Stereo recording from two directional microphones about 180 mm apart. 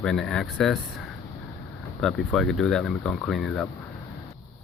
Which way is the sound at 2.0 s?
Centre (ahead or behind).